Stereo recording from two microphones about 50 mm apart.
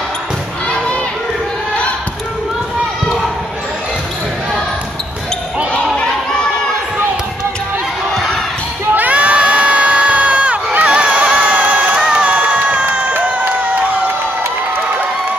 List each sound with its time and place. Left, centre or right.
8.9 s crowd: right